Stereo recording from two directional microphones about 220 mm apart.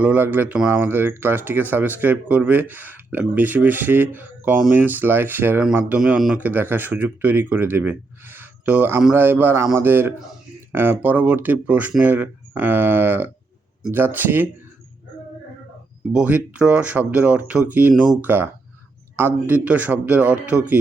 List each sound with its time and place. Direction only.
0.0 s speech: 5° right (ahead or behind)
16.1 s speech: 5° right (ahead or behind)